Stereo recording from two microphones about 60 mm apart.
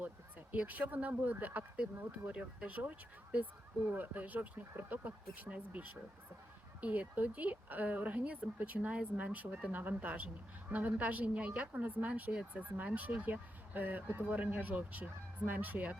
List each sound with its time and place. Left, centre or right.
0.5 s a woman's voice: right
2.3 s a woman's voice: centre
3.9 s a woman's voice: right
6.8 s a woman's voice: right